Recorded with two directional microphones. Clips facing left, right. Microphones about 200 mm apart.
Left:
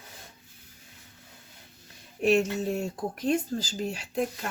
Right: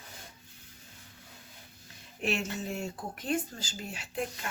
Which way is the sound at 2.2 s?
40° left (ahead or behind).